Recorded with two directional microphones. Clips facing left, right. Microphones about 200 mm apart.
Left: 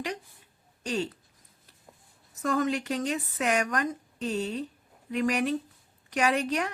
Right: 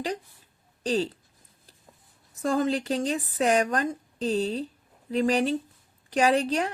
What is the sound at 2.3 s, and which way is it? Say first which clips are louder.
A woman's voice: right 2 dB; 30° right (ahead or behind).